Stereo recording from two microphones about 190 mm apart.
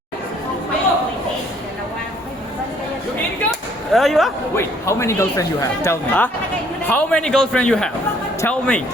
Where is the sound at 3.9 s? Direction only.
Centre (ahead or behind).